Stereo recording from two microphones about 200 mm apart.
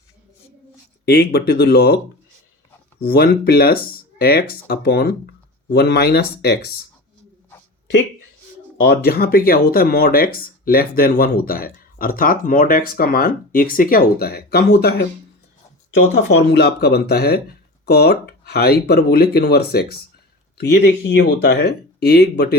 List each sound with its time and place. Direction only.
1.0 s speech: 55° left (ahead or behind)
3.0 s speech: 50° left (ahead or behind)
8.8 s speech: 50° left (ahead or behind)
16.0 s speech: 65° left (ahead or behind)